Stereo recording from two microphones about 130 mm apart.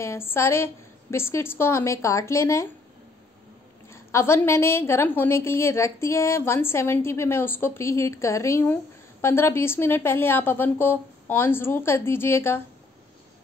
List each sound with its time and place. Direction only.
0.0 s a woman's voice: 20° left (ahead or behind)
3.9 s a woman's voice: 20° left (ahead or behind)